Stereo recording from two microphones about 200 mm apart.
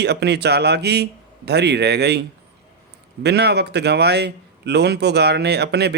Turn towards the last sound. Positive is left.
turn(degrees=-55)  # may be behind; listen again after turning